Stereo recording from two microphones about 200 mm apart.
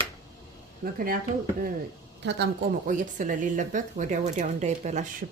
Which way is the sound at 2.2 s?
50° right (ahead or behind).